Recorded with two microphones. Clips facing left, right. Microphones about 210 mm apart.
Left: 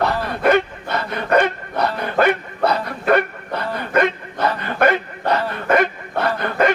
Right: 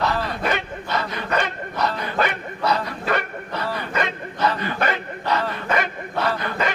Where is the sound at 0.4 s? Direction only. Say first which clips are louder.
Left 8 dB; 55° left (ahead or behind).